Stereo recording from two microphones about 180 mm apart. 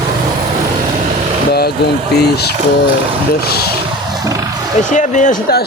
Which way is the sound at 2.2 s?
65° left (ahead or behind).